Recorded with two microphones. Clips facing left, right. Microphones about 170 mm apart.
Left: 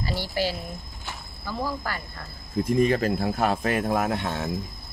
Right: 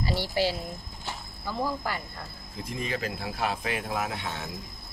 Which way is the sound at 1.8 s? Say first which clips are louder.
Even; 15° right (ahead or behind).